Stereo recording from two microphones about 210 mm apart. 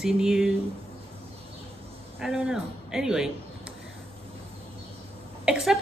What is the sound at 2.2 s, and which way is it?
A woman's voice, 5° right (ahead or behind).